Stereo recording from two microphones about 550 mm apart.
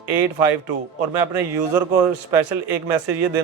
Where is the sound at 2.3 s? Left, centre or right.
Right.